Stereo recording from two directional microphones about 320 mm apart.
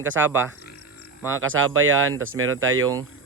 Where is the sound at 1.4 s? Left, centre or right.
Right.